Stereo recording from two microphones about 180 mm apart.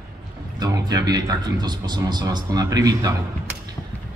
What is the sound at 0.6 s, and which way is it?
A man's voice, 20° right (ahead or behind).